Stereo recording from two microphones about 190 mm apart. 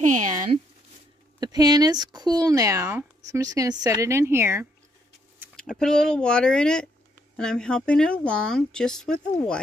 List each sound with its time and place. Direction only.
0.0 s a sound: 40° right (ahead or behind)
1.4 s speech: 20° right (ahead or behind)
5.6 s speech: 5° left (ahead or behind)